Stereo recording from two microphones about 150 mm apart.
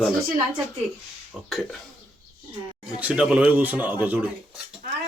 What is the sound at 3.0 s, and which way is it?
Speech, 10° right (ahead or behind).